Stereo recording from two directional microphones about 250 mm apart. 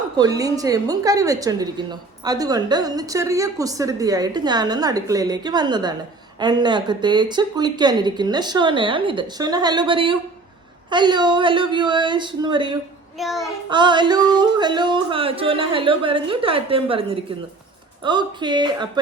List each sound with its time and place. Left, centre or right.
0.2 s a woman's voice: centre
10.9 s yodeling: centre
13.1 s child singing: centre
13.7 s yodeling: centre
18.0 s a woman's voice: centre